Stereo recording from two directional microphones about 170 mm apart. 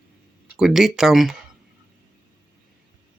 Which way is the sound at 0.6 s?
Centre (ahead or behind).